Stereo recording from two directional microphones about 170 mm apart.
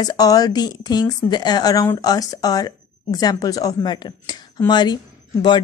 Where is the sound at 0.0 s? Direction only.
20° left (ahead or behind).